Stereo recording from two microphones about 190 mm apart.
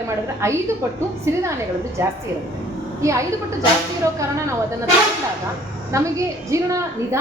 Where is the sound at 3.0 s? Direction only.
15° right (ahead or behind).